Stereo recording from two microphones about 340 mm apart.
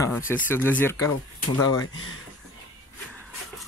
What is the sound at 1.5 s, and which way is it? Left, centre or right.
Speech, left.